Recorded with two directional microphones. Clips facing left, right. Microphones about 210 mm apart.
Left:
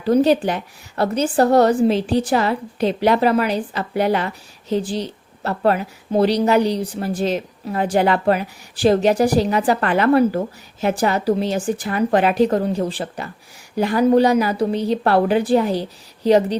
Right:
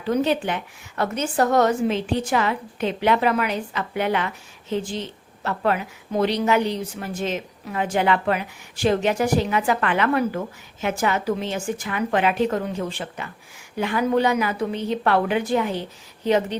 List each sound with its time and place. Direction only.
0.0 s a woman's voice: 35° left (ahead or behind)